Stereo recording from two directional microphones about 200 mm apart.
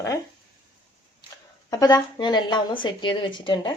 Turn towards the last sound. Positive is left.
turn(degrees=25)  # may be behind; listen again after turning